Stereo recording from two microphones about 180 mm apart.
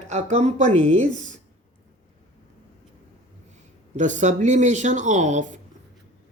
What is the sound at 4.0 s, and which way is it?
Speech, 45° right (ahead or behind).